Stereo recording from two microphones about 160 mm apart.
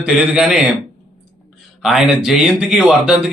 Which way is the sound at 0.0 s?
5° right (ahead or behind).